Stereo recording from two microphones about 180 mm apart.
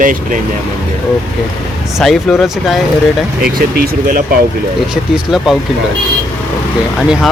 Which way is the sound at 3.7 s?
55° right (ahead or behind).